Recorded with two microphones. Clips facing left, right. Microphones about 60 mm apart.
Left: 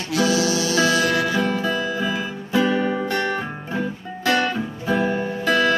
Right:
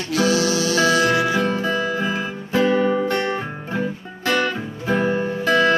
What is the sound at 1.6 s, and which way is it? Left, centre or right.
Music, right.